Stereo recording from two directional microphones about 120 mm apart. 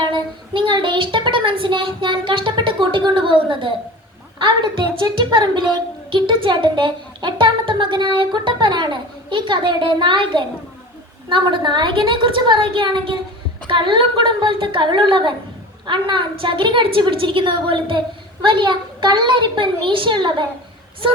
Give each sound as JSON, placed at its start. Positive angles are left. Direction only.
{"t": 0.0, "sound": "child singing", "side_deg": -40}
{"t": 2.9, "sound": "a sound", "side_deg": -40}
{"t": 4.4, "sound": "a woman's voice", "side_deg": -45}